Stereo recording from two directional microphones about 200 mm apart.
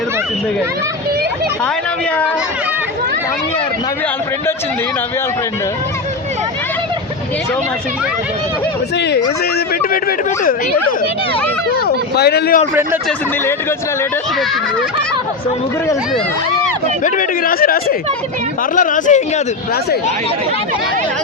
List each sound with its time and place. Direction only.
9.9 s speech: 45° left (ahead or behind)
11.7 s speech: 50° left (ahead or behind)
13.1 s speech: 10° left (ahead or behind)
17.0 s speech: 45° left (ahead or behind)